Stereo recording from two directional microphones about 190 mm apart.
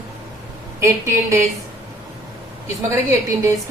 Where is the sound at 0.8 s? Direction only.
15° right (ahead or behind).